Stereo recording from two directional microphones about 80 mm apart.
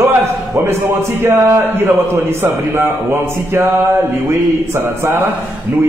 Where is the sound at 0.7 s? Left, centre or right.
Right.